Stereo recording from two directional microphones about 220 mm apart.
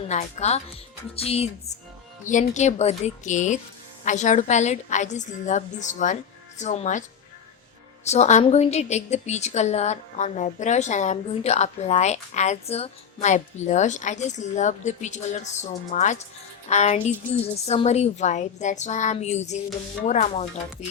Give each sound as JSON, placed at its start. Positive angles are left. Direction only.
{"t": 0.1, "sound": "a woman's voice", "side_deg": 30}
{"t": 8.0, "sound": "a woman's voice", "side_deg": 30}